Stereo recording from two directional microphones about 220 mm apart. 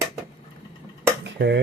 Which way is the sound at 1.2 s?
50° right (ahead or behind).